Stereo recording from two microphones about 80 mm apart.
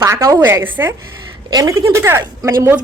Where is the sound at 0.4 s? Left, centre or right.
Right.